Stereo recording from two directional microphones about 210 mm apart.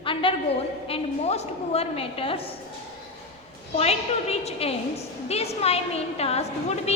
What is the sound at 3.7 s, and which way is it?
A woman's voice, 30° left (ahead or behind).